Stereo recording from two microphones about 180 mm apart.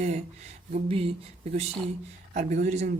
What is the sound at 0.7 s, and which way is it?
Speech, 30° right (ahead or behind).